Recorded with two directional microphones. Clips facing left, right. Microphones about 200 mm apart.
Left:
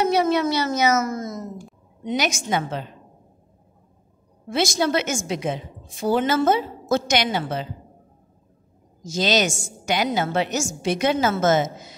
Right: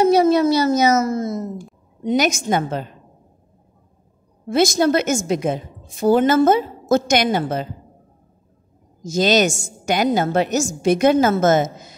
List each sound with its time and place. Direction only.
0.0 s a child's voice: 35° right (ahead or behind)
2.0 s a woman's voice: 45° right (ahead or behind)
4.5 s a woman's voice: 45° right (ahead or behind)
9.1 s a woman's voice: 50° right (ahead or behind)